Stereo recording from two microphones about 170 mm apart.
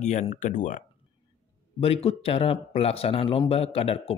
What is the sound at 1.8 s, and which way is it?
Speech, 35° left (ahead or behind).